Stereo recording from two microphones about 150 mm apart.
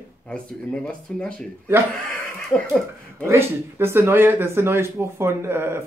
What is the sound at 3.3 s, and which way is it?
Speech, 15° right (ahead or behind).